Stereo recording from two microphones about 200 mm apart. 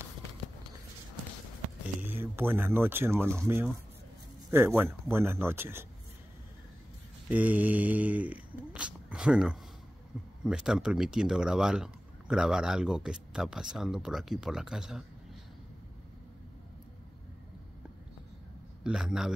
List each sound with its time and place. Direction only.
2.0 s speech: 10° right (ahead or behind)
7.2 s speech: 10° right (ahead or behind)
18.9 s speech: 5° right (ahead or behind)